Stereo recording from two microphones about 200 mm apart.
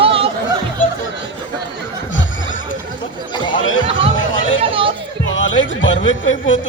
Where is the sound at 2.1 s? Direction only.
70° left (ahead or behind).